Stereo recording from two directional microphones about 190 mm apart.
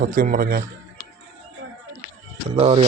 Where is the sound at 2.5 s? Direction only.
30° right (ahead or behind).